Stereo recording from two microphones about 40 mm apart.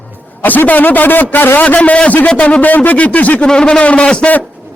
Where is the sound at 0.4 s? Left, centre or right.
Left.